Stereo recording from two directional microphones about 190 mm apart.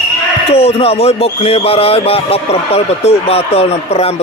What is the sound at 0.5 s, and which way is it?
Speech, 30° left (ahead or behind).